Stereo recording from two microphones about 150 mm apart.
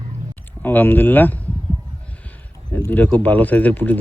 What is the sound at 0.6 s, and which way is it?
Speech, 15° left (ahead or behind).